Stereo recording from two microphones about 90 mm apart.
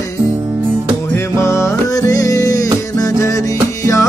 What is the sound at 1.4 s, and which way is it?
Music, 35° left (ahead or behind).